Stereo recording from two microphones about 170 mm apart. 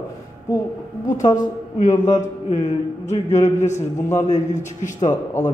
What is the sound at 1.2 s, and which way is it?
Speech, 20° left (ahead or behind).